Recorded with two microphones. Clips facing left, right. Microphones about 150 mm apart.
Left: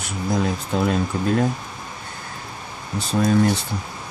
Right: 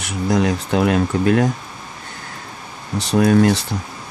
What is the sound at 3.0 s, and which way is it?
Speech, 70° right (ahead or behind).